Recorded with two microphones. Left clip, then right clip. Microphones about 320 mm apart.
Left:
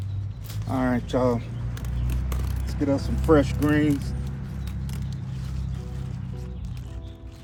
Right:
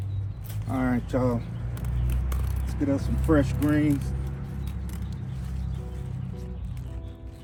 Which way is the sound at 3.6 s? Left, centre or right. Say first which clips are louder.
Left 2 dB; centre.